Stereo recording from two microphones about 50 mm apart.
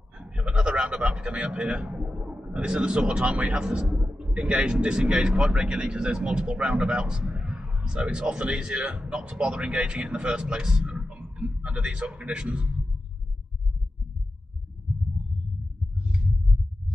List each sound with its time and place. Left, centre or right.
0.2 s a man's voice: centre